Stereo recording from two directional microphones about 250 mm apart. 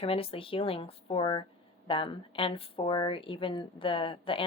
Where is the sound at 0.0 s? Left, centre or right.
Left.